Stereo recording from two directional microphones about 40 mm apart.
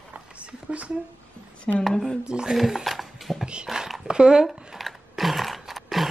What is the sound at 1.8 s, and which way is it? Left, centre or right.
Speech, centre.